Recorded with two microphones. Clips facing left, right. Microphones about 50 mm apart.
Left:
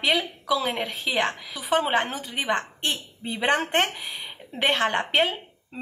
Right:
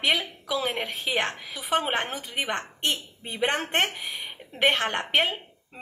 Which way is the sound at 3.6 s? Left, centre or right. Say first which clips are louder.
Left 2 dB; right.